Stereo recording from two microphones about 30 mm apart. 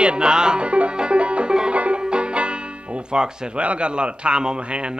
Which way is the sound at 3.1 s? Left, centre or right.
Right.